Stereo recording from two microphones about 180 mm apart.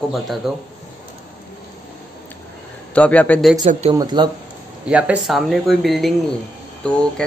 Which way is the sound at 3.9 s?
25° right (ahead or behind).